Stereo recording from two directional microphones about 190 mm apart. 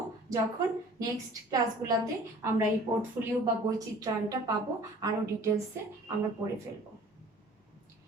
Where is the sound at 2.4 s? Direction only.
10° right (ahead or behind).